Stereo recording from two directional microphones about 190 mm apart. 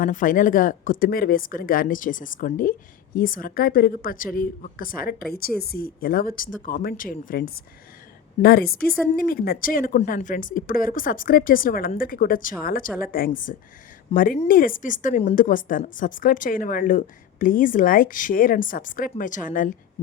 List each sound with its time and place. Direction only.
0.0 s speech: 45° left (ahead or behind)